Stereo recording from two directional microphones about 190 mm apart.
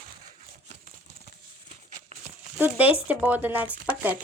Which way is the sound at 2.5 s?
10° right (ahead or behind).